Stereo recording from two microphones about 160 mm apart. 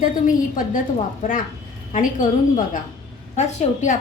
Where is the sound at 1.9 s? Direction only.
50° left (ahead or behind).